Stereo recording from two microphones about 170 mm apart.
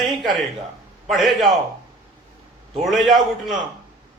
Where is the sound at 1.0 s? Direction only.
Centre (ahead or behind).